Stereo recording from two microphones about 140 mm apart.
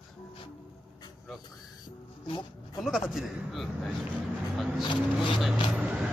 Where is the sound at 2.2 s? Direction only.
35° left (ahead or behind).